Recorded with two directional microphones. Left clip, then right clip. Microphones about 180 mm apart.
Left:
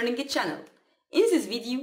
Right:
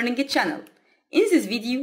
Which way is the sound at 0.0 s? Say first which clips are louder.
Right 4 dB; 15° right (ahead or behind).